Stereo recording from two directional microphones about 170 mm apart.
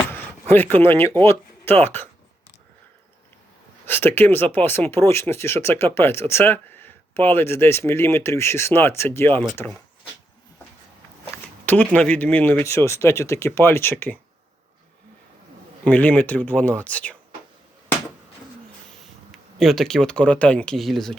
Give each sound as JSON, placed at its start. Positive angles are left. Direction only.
{"t": 0.1, "sound": "speech", "side_deg": 10}
{"t": 3.8, "sound": "speech", "side_deg": 10}
{"t": 11.6, "sound": "a sound", "side_deg": 10}
{"t": 11.9, "sound": "speech", "side_deg": 10}
{"t": 15.8, "sound": "speech", "side_deg": 10}
{"t": 19.5, "sound": "speech", "side_deg": 0}